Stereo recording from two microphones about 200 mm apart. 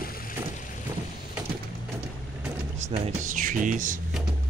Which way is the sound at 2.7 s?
35° right (ahead or behind).